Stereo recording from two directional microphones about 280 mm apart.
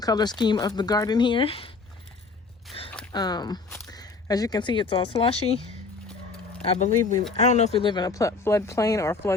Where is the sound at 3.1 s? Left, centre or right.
Centre.